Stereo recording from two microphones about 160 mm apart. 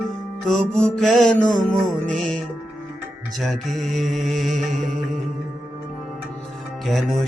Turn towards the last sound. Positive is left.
turn(degrees=0)  # may be behind; listen again after turning